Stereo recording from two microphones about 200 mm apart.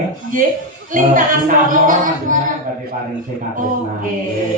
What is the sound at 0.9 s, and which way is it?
Speech, 40° right (ahead or behind).